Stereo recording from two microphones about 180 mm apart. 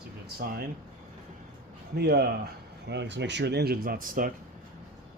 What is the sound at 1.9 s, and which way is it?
Speech, 65° right (ahead or behind).